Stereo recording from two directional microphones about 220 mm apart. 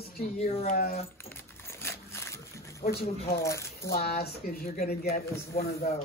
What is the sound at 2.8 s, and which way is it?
Speech, 45° left (ahead or behind).